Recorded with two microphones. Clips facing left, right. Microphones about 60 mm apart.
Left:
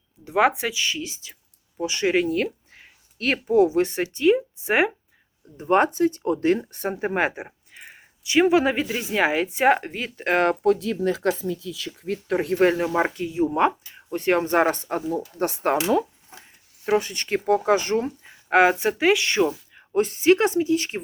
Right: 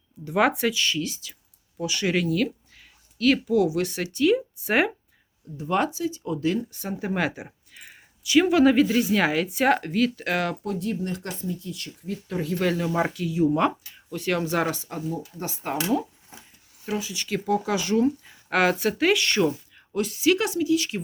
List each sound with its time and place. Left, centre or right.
0.3 s speech: centre
5.5 s speech: left
10.3 s speech: left
10.6 s speech: left
12.1 s speech: left
12.6 s speech: left
12.9 s speech: left
14.8 s speech: left
16.9 s speech: left
17.3 s speech: left
18.2 s speech: left
20.0 s speech: left